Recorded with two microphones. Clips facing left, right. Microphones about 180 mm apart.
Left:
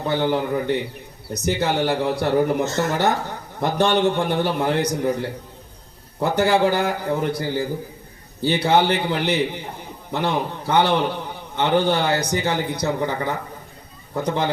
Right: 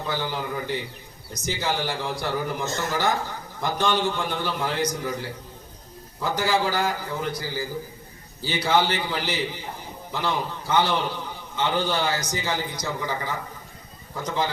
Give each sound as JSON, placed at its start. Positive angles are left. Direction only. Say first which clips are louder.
{"t": 0.0, "sound": "a man's voice", "louder": "left 8 dB", "side_deg": 60}